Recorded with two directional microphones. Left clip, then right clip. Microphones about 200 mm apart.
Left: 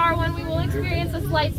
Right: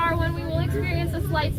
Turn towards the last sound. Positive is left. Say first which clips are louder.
# left 3 dB
turn(degrees=45)  # may be behind; listen again after turning